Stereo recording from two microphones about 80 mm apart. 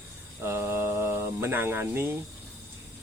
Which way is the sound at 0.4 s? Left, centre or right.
Right.